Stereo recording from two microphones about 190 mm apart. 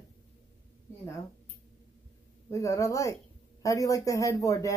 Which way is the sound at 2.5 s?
15° left (ahead or behind).